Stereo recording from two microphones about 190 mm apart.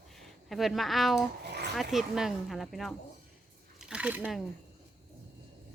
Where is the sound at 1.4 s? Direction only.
65° right (ahead or behind).